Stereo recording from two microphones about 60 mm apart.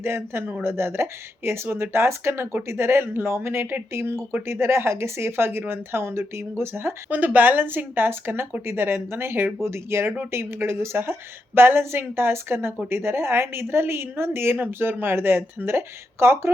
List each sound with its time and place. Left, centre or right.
0.0 s a woman's voice: right
7.1 s a woman's voice: right